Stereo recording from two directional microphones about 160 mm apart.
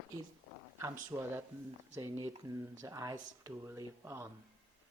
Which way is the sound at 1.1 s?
15° right (ahead or behind).